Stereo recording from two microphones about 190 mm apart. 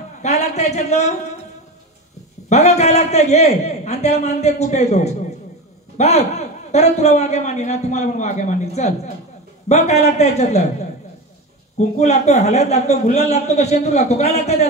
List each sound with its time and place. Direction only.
0.2 s a sound: 35° left (ahead or behind)
2.5 s a man's voice: 35° left (ahead or behind)
12.0 s a man's voice: 35° left (ahead or behind)